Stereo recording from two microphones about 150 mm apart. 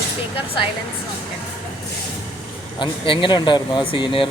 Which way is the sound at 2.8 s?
35° left (ahead or behind).